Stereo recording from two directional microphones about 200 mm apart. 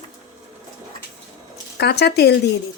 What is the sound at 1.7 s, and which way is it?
Speech, 55° left (ahead or behind).